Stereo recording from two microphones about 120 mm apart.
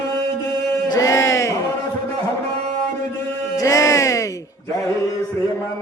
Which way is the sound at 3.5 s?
30° left (ahead or behind).